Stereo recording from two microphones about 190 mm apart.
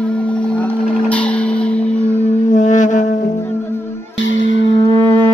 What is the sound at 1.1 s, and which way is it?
Music, 5° left (ahead or behind).